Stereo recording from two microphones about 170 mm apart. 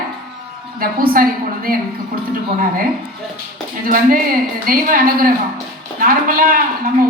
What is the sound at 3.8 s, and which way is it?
A woman's voice, 55° right (ahead or behind).